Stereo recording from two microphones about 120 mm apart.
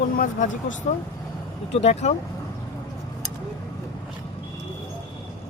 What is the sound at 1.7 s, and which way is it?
Speech, 65° left (ahead or behind).